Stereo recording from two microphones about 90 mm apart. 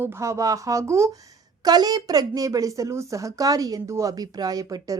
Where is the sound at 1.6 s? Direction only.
50° right (ahead or behind).